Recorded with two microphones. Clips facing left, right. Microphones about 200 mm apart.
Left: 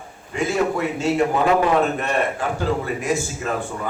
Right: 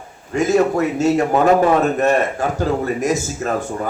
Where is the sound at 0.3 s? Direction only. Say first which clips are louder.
Right 6 dB; 40° right (ahead or behind).